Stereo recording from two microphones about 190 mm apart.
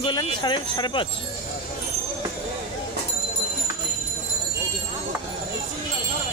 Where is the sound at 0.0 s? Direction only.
25° left (ahead or behind).